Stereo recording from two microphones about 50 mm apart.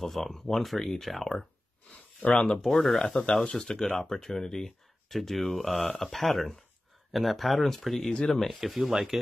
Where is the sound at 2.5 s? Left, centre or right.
Centre.